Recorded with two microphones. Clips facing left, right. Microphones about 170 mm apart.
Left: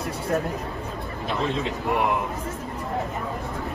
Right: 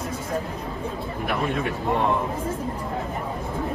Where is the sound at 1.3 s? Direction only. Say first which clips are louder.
Even; 25° left (ahead or behind).